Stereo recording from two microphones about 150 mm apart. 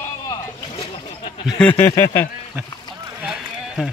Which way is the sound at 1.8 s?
20° left (ahead or behind).